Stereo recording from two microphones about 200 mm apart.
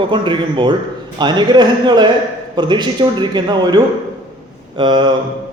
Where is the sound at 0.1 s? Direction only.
25° right (ahead or behind).